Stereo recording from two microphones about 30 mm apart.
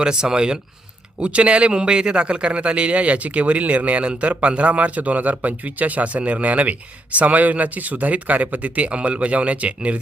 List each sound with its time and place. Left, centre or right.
0.0 s speech: right
1.2 s speech: right
4.9 s speech: right